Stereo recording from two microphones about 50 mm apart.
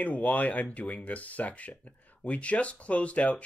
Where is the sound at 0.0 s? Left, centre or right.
Left.